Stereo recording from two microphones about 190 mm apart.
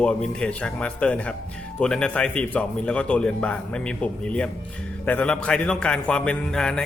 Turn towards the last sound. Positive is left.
turn(degrees=5)  # may be behind; listen again after turning